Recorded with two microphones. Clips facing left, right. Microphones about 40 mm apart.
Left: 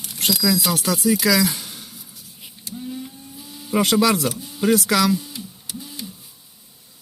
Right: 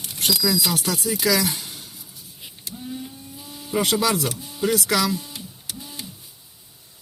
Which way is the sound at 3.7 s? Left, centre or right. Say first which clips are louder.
Left 4 dB; left.